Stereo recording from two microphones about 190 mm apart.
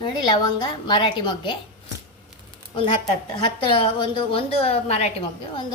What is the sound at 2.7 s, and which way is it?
A woman's voice, 25° left (ahead or behind).